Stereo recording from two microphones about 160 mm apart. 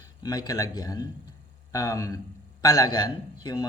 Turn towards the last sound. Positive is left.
turn(degrees=25)  # may be behind; listen again after turning